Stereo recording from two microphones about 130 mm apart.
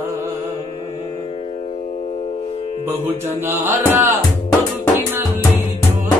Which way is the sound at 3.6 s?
15° right (ahead or behind).